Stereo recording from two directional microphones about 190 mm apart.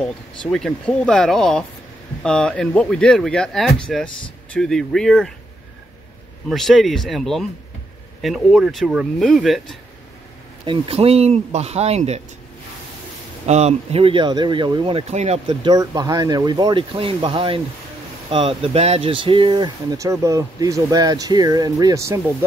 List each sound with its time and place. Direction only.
0.0 s speech: 5° left (ahead or behind)
6.5 s speech: centre (ahead or behind)
10.6 s speech: 30° right (ahead or behind)
13.5 s speech: 35° right (ahead or behind); by 22.2 s 15° right (ahead or behind)